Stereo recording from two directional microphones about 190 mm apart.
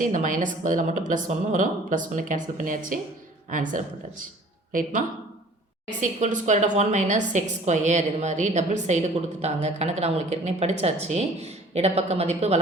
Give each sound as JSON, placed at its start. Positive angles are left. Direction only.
{"t": 0.0, "sound": "a woman's voice", "side_deg": -40}